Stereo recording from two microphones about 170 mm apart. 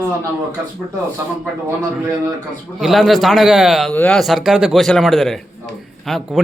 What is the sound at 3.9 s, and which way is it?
Speech, 10° left (ahead or behind).